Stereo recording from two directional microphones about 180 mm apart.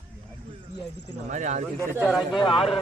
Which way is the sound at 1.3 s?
45° right (ahead or behind).